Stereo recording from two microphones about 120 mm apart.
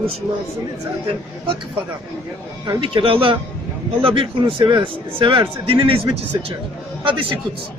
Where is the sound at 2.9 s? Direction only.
45° right (ahead or behind).